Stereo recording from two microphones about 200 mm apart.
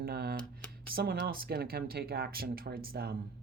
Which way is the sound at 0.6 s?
5° left (ahead or behind).